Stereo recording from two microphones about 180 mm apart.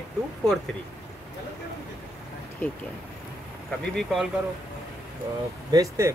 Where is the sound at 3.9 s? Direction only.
Centre (ahead or behind).